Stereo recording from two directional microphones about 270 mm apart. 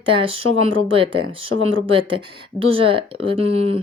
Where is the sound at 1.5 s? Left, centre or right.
Right.